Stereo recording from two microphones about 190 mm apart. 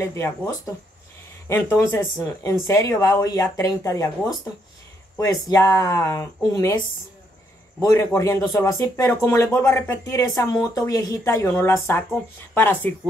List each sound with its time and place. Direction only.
0.0 s speech: 15° left (ahead or behind)
7.9 s speech: 15° left (ahead or behind)